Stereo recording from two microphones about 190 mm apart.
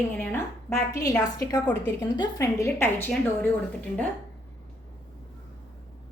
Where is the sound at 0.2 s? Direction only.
10° left (ahead or behind).